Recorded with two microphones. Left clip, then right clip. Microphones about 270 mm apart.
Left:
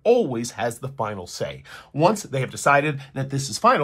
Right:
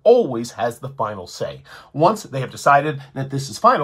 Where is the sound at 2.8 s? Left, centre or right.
Left.